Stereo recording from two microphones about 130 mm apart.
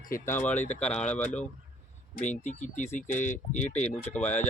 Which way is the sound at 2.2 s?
65° left (ahead or behind).